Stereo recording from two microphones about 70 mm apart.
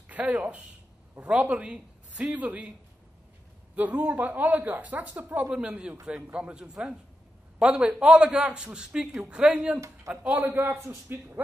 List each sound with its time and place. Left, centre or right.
0.1 s speech: right
3.7 s a man's voice: right
10.5 s a man's voice: right